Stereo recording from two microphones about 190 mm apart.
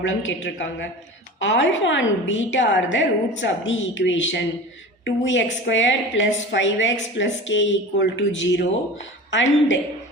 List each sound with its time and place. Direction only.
0.0 s a woman's voice: 80° left